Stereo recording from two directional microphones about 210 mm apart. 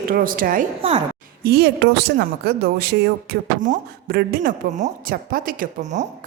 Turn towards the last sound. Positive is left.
turn(degrees=-40)  # may be behind; listen again after turning